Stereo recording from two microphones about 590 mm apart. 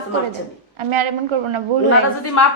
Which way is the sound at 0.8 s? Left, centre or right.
Right.